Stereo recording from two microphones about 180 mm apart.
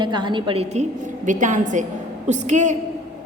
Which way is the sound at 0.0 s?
25° right (ahead or behind).